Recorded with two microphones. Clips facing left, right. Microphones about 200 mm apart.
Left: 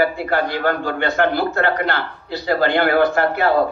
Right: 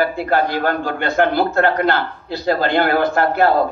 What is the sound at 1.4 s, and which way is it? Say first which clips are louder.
A man's voice: right 3 dB; 45° right (ahead or behind).